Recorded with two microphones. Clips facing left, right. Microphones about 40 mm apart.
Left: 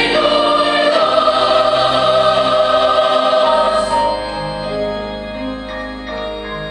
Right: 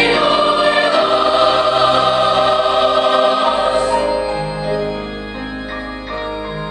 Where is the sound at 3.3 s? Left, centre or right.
Centre.